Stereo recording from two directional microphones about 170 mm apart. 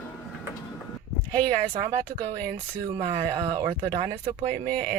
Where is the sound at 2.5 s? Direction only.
25° right (ahead or behind).